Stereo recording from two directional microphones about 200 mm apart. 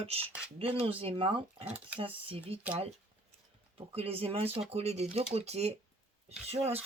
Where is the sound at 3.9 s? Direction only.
30° right (ahead or behind).